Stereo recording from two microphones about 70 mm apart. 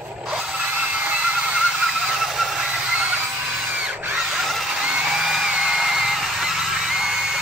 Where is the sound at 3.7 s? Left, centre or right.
Centre.